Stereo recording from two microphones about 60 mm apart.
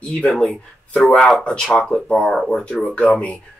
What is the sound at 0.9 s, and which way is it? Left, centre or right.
Speech, left.